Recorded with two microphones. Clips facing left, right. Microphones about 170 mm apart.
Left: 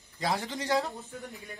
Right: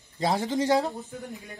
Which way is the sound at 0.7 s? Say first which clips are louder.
Right 3 dB; 40° right (ahead or behind).